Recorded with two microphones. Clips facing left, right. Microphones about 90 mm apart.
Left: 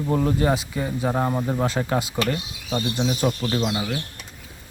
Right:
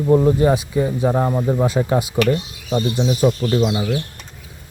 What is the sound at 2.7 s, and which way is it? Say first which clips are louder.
Speech: right 5 dB; 5° right (ahead or behind).